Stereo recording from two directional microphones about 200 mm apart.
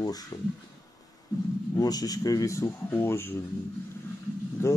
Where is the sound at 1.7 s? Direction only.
20° left (ahead or behind).